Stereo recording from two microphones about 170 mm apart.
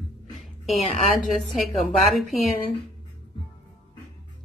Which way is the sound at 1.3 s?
Centre (ahead or behind).